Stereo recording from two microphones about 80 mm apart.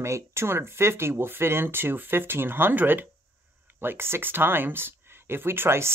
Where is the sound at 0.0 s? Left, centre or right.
Right.